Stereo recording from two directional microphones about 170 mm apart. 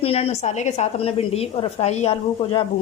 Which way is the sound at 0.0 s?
35° left (ahead or behind).